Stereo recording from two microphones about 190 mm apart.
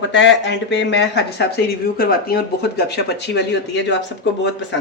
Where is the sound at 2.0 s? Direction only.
55° left (ahead or behind).